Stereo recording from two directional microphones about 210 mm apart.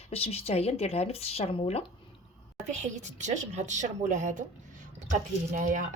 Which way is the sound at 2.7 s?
35° right (ahead or behind).